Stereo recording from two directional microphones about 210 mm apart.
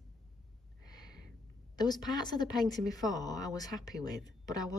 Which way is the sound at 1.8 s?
20° left (ahead or behind).